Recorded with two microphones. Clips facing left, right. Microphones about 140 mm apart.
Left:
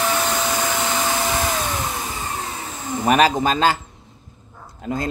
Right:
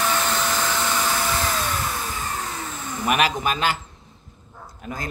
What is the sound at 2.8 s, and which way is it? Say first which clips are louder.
Speech: left 6 dB; 30° left (ahead or behind).